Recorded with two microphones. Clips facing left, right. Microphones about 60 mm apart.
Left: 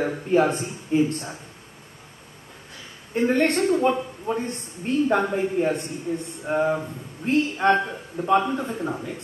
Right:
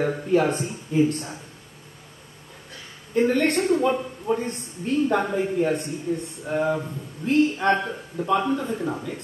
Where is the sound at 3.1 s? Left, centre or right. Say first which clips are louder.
Even; left.